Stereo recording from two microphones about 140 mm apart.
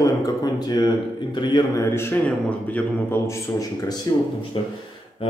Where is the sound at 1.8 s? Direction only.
15° left (ahead or behind); by 4.7 s 35° left (ahead or behind).